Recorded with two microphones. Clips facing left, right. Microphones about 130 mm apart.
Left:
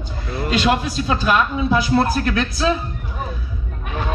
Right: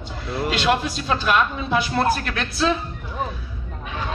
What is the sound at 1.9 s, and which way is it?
Speech, 35° left (ahead or behind).